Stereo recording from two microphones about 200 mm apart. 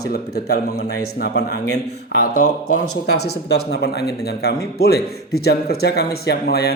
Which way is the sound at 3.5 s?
55° left (ahead or behind).